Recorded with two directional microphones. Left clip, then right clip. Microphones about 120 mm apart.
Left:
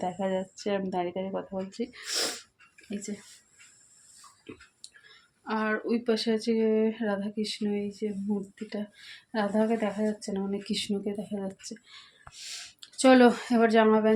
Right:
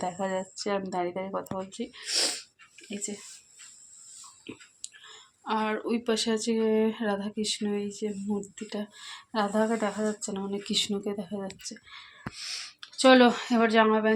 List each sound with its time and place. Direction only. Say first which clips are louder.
0.0 s speech: even; 25° left (ahead or behind)
1.9 s speech: right 6 dB; 45° left (ahead or behind)
4.4 s speech: right 2 dB; 10° left (ahead or behind)
11.6 s speech: right 2 dB; 40° left (ahead or behind)
12.8 s speech: right 1 dB; 30° left (ahead or behind)